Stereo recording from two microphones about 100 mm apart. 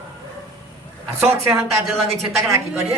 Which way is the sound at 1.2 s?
25° right (ahead or behind).